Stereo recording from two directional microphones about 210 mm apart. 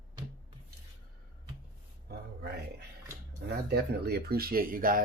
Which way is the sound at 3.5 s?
50° right (ahead or behind).